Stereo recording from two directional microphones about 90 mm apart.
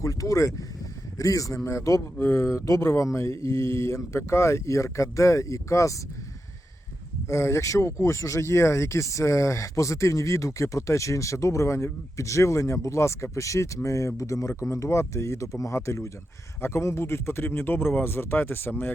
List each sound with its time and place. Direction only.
0.0 s speech: 35° left (ahead or behind)
7.3 s a man's voice: 30° left (ahead or behind)